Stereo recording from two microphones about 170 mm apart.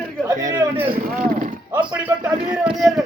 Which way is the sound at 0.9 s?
55° right (ahead or behind).